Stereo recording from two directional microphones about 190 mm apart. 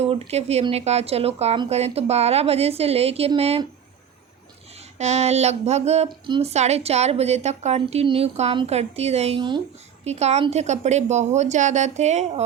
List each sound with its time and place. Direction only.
0.0 s a woman's voice: 30° right (ahead or behind)
4.9 s a woman's voice: 35° right (ahead or behind)